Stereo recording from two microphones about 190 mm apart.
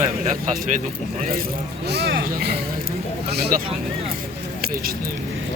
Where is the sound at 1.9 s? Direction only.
55° right (ahead or behind).